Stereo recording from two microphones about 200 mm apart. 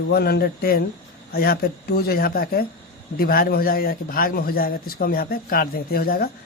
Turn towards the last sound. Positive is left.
turn(degrees=50)  # may be behind; listen again after turning